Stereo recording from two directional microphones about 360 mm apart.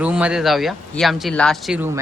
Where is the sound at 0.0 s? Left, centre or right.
Centre.